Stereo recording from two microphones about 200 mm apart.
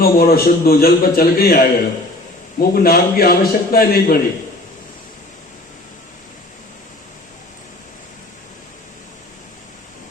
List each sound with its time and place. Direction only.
0.0 s a man's voice: 50° left (ahead or behind)